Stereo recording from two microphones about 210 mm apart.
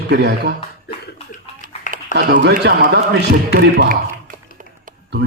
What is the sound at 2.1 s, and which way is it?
A man's voice, 55° right (ahead or behind).